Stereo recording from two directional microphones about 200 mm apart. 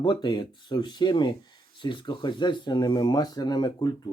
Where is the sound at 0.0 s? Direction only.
20° left (ahead or behind).